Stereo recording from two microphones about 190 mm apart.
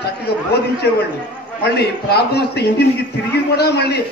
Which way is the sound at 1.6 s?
60° left (ahead or behind).